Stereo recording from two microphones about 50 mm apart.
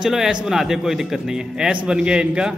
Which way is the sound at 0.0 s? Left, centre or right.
Centre.